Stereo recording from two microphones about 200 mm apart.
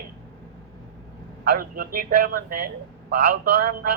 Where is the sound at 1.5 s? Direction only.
45° right (ahead or behind).